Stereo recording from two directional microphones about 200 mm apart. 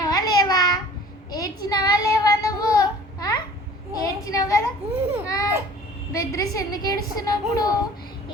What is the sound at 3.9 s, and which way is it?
Speech, 20° left (ahead or behind).